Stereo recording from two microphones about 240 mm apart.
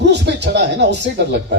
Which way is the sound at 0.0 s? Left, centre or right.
Right.